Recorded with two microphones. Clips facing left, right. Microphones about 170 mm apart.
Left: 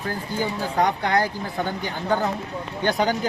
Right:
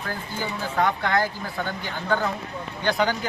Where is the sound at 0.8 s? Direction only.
15° left (ahead or behind).